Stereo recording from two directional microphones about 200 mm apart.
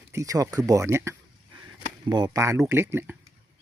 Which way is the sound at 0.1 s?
15° right (ahead or behind).